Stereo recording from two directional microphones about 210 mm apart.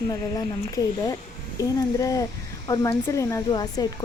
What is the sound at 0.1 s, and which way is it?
Speech, 15° left (ahead or behind).